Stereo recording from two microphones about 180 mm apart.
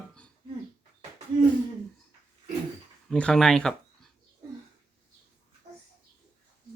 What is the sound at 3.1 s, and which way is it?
Speech, 5° left (ahead or behind).